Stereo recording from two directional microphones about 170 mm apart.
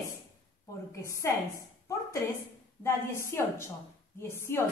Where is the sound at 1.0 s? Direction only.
15° left (ahead or behind).